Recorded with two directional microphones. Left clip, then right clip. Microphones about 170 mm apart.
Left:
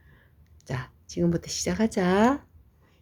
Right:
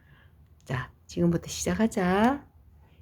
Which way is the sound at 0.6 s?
5° left (ahead or behind).